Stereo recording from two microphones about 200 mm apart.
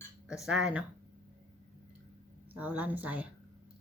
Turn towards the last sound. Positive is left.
turn(degrees=-10)  # may be behind; listen again after turning